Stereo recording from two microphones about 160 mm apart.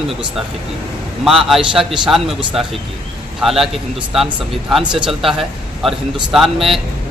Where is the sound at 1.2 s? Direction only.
5° right (ahead or behind).